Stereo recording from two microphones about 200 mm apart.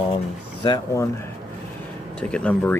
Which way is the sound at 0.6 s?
20° left (ahead or behind).